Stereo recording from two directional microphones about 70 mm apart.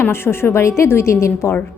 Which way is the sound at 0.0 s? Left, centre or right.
Left.